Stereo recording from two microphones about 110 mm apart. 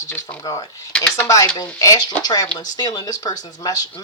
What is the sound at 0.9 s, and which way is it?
Speech, 10° left (ahead or behind).